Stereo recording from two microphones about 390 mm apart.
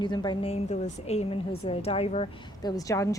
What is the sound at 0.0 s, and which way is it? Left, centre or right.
A woman's voice, centre.